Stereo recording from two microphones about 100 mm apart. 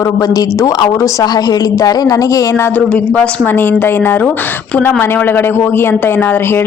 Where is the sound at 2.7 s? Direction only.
10° left (ahead or behind).